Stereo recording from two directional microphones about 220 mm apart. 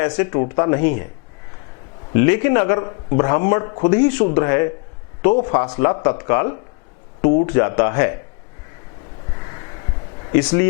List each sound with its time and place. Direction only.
0.0 s speech: 20° left (ahead or behind)
2.1 s speech: 15° left (ahead or behind)
10.3 s speech: 10° left (ahead or behind)